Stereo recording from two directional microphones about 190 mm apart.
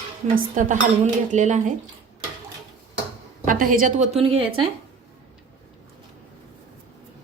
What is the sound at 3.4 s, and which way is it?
A woman's voice, 45° right (ahead or behind).